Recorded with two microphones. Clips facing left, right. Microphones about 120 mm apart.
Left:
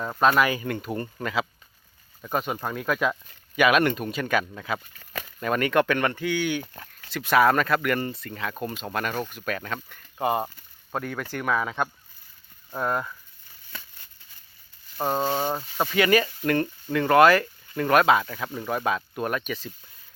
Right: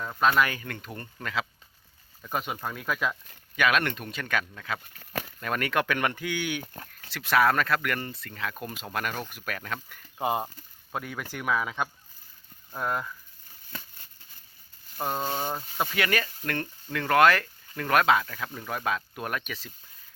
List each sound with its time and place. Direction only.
0.3 s speech: 10° left (ahead or behind)
2.6 s speech: 5° left (ahead or behind)
4.8 s speech: 55° right (ahead or behind)
5.4 s speech: centre (ahead or behind)
7.1 s speech: centre (ahead or behind)
13.5 s a sound: 40° right (ahead or behind)
14.9 s speech: 30° left (ahead or behind)
15.9 s speech: centre (ahead or behind)